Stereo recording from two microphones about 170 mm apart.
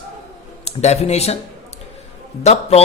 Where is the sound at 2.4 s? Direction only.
35° left (ahead or behind).